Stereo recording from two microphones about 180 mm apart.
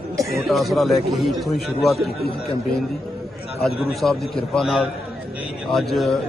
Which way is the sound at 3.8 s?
Centre (ahead or behind).